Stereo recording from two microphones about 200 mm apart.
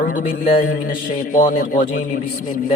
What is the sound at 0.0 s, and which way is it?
Mantra, 40° left (ahead or behind).